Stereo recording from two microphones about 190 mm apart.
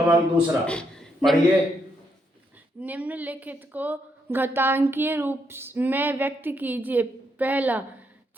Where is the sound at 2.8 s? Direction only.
10° right (ahead or behind).